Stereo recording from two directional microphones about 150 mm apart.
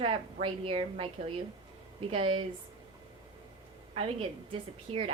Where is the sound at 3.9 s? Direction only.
40° right (ahead or behind).